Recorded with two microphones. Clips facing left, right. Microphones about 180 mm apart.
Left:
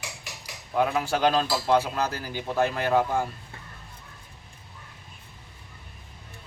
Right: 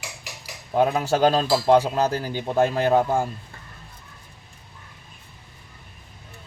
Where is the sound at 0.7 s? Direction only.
35° right (ahead or behind).